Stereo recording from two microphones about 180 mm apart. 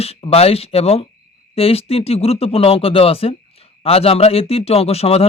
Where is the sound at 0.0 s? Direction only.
35° left (ahead or behind).